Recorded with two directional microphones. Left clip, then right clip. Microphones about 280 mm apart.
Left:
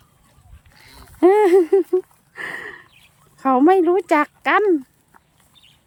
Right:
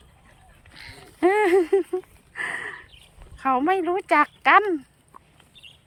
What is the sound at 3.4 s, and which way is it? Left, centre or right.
A woman's voice, centre.